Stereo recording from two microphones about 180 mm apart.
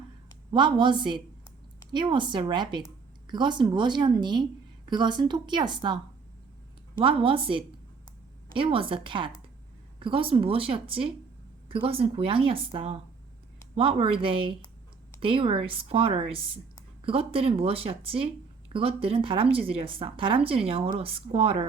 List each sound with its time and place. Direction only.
0.5 s speech: 25° right (ahead or behind)
7.0 s a woman's voice: 30° right (ahead or behind)